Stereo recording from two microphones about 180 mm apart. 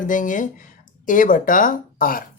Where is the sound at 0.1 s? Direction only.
45° left (ahead or behind).